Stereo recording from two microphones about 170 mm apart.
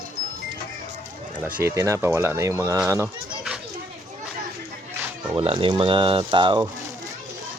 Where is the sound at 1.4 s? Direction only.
10° right (ahead or behind).